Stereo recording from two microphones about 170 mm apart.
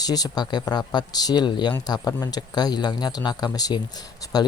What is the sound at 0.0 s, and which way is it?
A man's voice, 25° left (ahead or behind).